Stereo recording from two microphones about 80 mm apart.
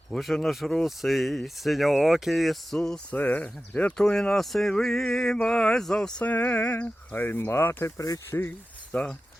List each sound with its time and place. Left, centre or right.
0.1 s speech: centre
3.2 s speech: left
6.2 s speech: centre; by 8.2 s left
8.3 s speech: left
8.9 s speech: centre